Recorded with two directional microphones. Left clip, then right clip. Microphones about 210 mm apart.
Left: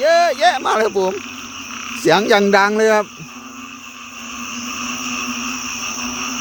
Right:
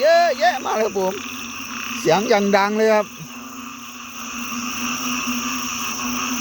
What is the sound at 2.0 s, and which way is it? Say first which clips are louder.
Speech: left 4 dB; 20° left (ahead or behind).